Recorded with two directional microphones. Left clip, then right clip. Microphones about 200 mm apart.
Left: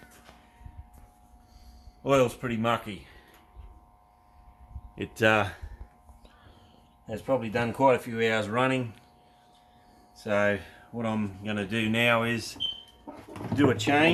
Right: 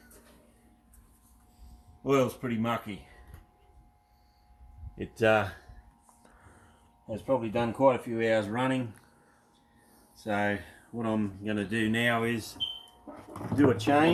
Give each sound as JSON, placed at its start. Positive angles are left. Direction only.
{"t": 2.0, "sound": "speech", "side_deg": 10}
{"t": 4.9, "sound": "speech", "side_deg": 10}
{"t": 7.1, "sound": "speech", "side_deg": 35}
{"t": 10.2, "sound": "speech", "side_deg": 30}
{"t": 10.9, "sound": "speech", "side_deg": 15}
{"t": 13.7, "sound": "speech", "side_deg": 30}